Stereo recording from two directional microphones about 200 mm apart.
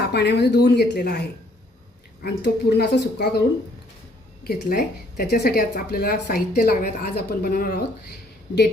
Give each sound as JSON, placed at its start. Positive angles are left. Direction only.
{"t": 0.1, "sound": "speech", "side_deg": 55}
{"t": 4.4, "sound": "speech", "side_deg": 50}